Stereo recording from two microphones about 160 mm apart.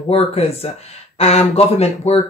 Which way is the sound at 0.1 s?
40° left (ahead or behind).